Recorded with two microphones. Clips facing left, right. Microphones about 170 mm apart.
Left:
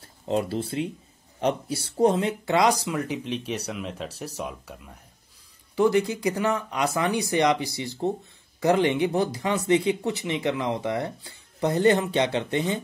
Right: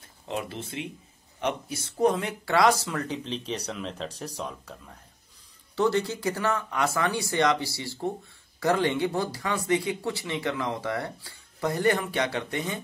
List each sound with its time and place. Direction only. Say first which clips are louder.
0.3 s speech: left 7 dB; 35° left (ahead or behind)